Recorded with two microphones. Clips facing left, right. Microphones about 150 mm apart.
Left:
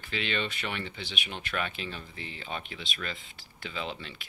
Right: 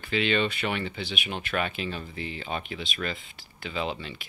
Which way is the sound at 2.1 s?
5° right (ahead or behind).